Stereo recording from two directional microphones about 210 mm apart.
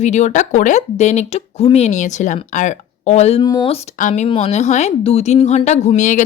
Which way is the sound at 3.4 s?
20° left (ahead or behind).